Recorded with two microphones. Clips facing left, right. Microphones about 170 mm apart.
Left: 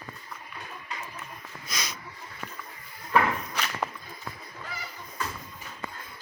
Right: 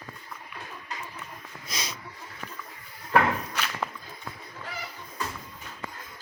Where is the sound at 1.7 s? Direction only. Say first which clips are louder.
Even; 30° right (ahead or behind).